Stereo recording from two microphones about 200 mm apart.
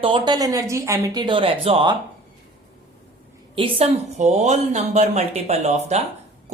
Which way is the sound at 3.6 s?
30° right (ahead or behind).